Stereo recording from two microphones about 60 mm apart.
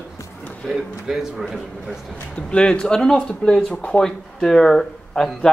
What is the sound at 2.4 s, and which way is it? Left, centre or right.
A man's voice, centre.